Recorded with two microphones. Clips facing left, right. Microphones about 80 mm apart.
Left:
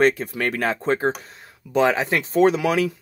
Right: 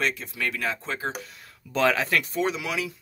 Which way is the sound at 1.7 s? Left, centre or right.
Left.